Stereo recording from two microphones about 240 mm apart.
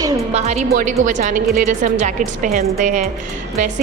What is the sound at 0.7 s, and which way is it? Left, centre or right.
A woman's voice, right.